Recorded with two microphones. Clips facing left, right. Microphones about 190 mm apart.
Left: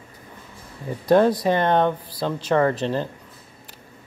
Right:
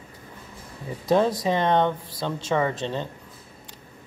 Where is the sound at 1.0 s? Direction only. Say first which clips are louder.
Left 4 dB; centre (ahead or behind).